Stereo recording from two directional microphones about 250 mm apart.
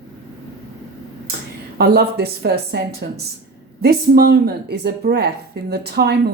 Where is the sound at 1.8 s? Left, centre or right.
Right.